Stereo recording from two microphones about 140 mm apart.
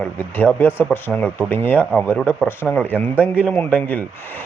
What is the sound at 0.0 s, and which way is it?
A man's voice, 10° left (ahead or behind).